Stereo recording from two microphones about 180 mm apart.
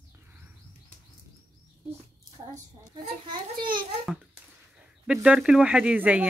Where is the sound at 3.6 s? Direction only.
25° right (ahead or behind).